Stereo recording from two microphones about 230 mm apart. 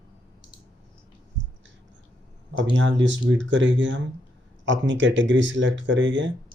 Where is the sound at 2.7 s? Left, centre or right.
Right.